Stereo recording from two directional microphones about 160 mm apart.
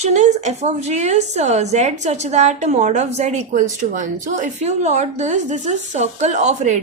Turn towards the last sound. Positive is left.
turn(degrees=-50)  # may be behind; listen again after turning